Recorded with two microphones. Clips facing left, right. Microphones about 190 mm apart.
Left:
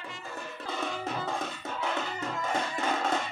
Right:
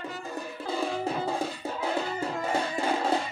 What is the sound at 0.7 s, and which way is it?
Music, 30° right (ahead or behind).